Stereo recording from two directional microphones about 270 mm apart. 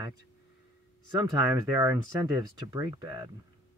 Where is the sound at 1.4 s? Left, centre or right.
Centre.